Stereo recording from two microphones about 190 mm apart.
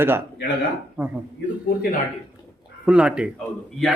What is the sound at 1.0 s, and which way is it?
Speech, 10° right (ahead or behind).